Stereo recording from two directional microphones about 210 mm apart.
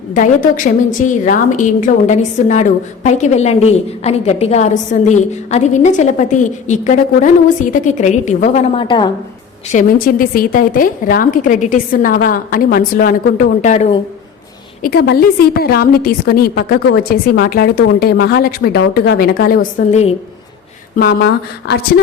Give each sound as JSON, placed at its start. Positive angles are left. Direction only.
{"t": 0.1, "sound": "a woman's voice", "side_deg": 40}
{"t": 9.7, "sound": "a woman's voice", "side_deg": 40}
{"t": 14.8, "sound": "a woman's voice", "side_deg": 50}
{"t": 20.9, "sound": "a woman's voice", "side_deg": 50}